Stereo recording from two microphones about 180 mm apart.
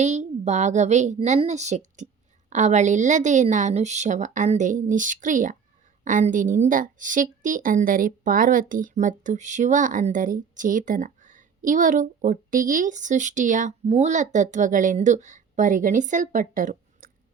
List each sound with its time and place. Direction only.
0.0 s a woman's voice: 40° right (ahead or behind)